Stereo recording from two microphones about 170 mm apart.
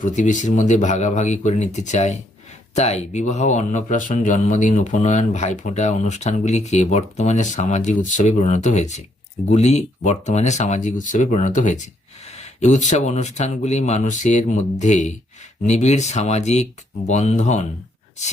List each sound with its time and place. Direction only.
0.0 s a man's voice: 45° left (ahead or behind)